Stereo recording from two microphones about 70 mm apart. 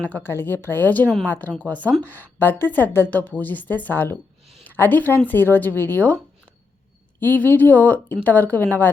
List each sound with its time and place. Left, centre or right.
0.0 s a woman's voice: left
7.2 s a woman's voice: left